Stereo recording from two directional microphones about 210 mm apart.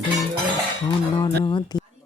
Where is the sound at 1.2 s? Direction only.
20° left (ahead or behind).